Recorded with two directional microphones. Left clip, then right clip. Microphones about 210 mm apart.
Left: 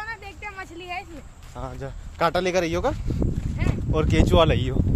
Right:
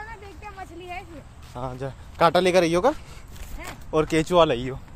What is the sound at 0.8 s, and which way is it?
Speech, 50° left (ahead or behind).